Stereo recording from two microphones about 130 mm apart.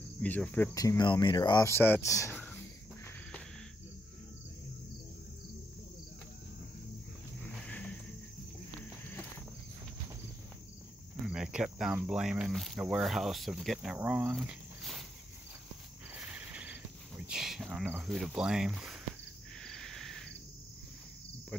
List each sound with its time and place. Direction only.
0.2 s speech: 10° left (ahead or behind)
0.7 s speech: 30° left (ahead or behind)
1.7 s speech: 15° left (ahead or behind)
2.3 s a sound: 10° left (ahead or behind)
7.4 s a sound: 10° left (ahead or behind)
11.2 s cricket: 5° right (ahead or behind)
11.9 s speech: 5° right (ahead or behind)
14.3 s a sound: 5° right (ahead or behind)
16.2 s cricket: 10° right (ahead or behind)
17.2 s a sound: 5° right (ahead or behind)
18.0 s speech: centre (ahead or behind)
19.6 s cricket: 5° left (ahead or behind)